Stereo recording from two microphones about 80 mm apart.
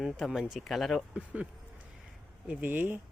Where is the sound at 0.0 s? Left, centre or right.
Centre.